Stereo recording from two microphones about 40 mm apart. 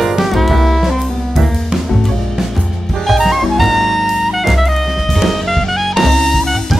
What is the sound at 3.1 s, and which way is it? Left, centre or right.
Jazz, centre.